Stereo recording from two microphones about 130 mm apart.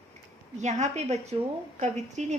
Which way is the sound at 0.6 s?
60° right (ahead or behind).